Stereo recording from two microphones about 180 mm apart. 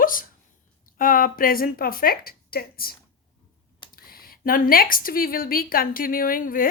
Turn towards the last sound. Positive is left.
turn(degrees=50)  # may be behind; listen again after turning